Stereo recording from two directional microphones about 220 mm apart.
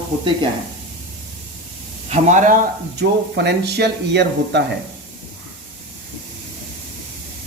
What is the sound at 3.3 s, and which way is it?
Speech, 50° right (ahead or behind).